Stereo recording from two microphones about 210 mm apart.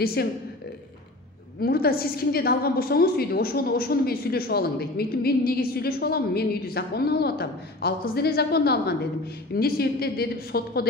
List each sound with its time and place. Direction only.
0.0 s a woman's voice: 50° left (ahead or behind)
1.6 s a woman's voice: 45° left (ahead or behind)